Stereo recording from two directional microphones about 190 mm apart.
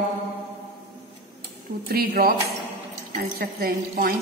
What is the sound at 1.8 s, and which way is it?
Speech, 50° right (ahead or behind).